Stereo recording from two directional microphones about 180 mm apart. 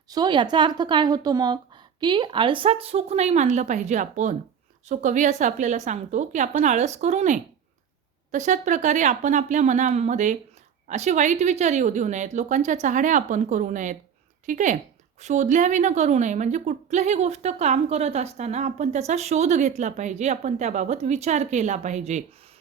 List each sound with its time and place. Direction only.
0.1 s a woman's voice: 25° right (ahead or behind); by 22.2 s 40° right (ahead or behind)